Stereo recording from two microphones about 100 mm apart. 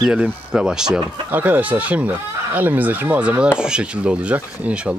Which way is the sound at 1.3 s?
15° right (ahead or behind).